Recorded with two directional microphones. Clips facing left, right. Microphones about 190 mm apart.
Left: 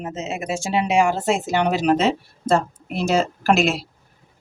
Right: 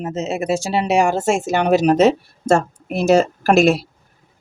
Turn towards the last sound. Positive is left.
turn(degrees=-45)  # may be behind; listen again after turning